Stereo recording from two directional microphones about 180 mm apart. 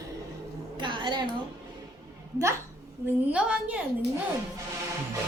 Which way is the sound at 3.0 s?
15° right (ahead or behind).